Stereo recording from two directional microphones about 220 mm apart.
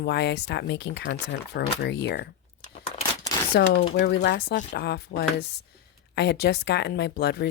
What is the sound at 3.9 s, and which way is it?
Speech, 50° left (ahead or behind).